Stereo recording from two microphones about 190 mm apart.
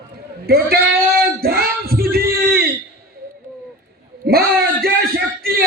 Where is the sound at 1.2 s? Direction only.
55° right (ahead or behind).